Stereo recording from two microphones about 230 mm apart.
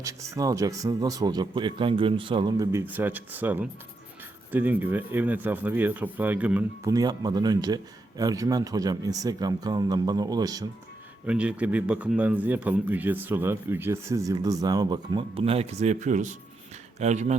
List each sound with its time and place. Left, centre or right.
0.0 s a man's voice: centre
11.3 s a man's voice: centre; by 17.3 s right